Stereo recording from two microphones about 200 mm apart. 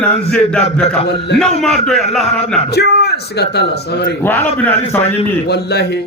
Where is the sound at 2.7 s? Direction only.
55° left (ahead or behind).